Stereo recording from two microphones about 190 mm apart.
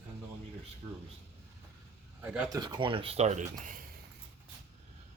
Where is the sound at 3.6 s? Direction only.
45° right (ahead or behind).